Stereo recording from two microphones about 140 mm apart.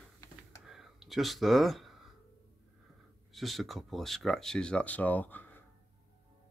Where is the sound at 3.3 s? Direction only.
Centre (ahead or behind).